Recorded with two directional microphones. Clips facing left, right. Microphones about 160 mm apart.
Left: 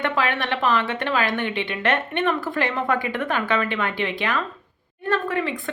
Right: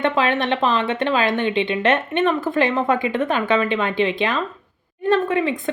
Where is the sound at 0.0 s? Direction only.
20° right (ahead or behind).